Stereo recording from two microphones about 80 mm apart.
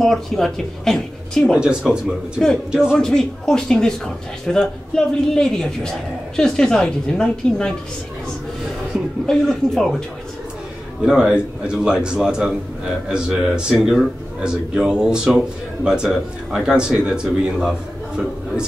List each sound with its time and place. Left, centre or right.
0.0 s speech: centre
1.5 s speech: centre
3.0 s a woman's voice: centre
9.2 s a woman's voice: centre
11.1 s speech: centre